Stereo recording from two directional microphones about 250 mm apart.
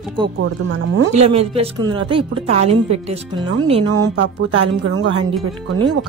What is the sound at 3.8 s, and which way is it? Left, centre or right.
Speech, right.